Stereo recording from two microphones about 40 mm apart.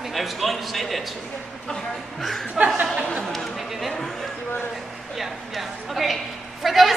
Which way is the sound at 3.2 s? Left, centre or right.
Centre.